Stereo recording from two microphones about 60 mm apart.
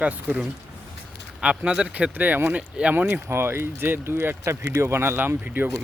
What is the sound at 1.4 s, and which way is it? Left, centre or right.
Speech, centre.